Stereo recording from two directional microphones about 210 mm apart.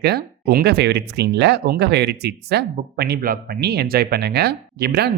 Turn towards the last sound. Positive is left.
turn(degrees=-50)  # may be behind; listen again after turning